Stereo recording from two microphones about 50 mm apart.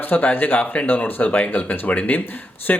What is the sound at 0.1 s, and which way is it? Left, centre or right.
Speech, left.